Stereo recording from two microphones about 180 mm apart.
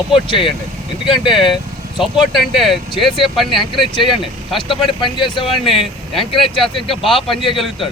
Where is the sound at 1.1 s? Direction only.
Centre (ahead or behind).